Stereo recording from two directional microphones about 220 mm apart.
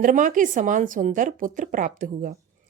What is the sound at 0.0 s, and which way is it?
Speech, 35° right (ahead or behind).